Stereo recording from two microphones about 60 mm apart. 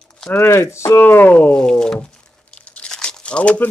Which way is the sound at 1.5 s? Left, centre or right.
Centre.